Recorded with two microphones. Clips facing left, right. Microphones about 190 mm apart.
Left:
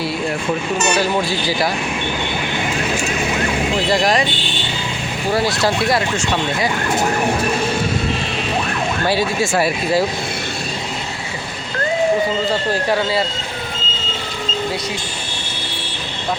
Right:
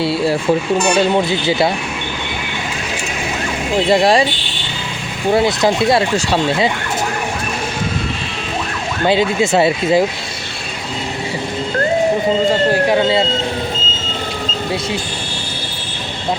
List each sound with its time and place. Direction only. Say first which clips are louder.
0.9 s speech: right 4 dB; 25° right (ahead or behind)
3.8 s speech: right 6 dB; 25° right (ahead or behind)
5.3 s speech: right 4 dB; 20° right (ahead or behind)
9.0 s speech: right 6 dB; 20° right (ahead or behind)
12.9 s speech: right 4 dB; 25° right (ahead or behind)